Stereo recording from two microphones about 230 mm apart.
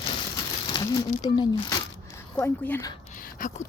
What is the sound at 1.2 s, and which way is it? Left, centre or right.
Speech, centre.